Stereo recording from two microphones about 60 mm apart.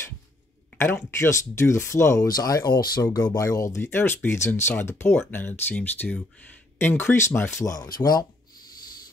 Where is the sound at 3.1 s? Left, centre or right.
Left.